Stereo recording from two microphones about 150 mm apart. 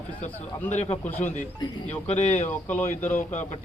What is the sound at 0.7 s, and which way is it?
Speech, 50° left (ahead or behind).